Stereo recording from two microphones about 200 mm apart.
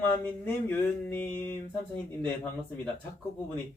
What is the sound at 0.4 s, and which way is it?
Speech, 10° left (ahead or behind).